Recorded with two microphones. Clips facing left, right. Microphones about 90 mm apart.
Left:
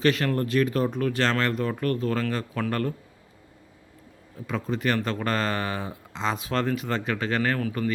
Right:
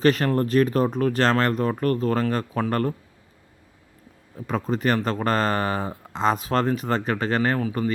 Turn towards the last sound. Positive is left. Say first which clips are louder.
# right 3 dB
turn(degrees=-30)  # may be behind; listen again after turning